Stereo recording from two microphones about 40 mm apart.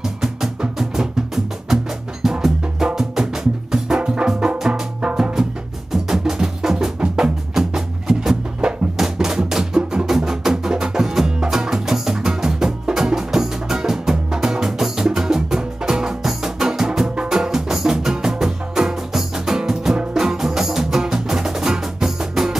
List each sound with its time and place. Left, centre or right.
0.7 s music: centre